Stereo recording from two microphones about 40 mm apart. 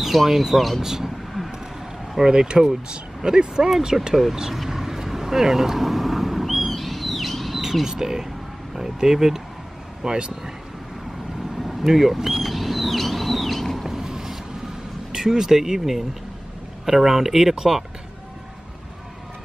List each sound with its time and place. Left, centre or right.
0.0 s speech: centre
0.8 s speech: centre
2.2 s speech: right
4.6 s vehicle: centre
7.8 s speech: centre
11.5 s a sound: centre
13.8 s a sound: centre
15.1 s speech: centre